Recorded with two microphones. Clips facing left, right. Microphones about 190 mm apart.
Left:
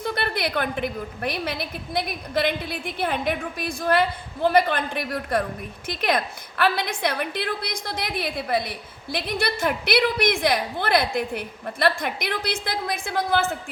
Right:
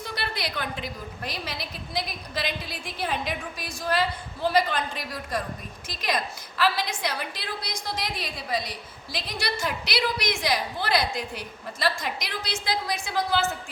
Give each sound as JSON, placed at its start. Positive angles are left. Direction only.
{"t": 0.0, "sound": "a woman's voice", "side_deg": 55}